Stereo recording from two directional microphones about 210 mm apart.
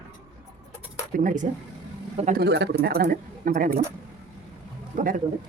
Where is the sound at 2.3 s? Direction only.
55° right (ahead or behind).